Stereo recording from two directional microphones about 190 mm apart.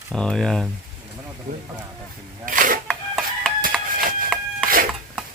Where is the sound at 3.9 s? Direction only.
50° right (ahead or behind).